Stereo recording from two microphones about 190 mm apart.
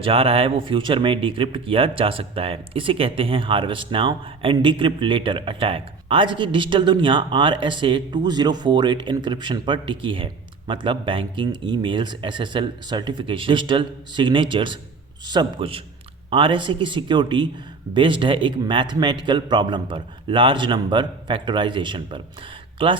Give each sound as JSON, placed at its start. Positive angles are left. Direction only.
{"t": 0.0, "sound": "speech", "side_deg": -30}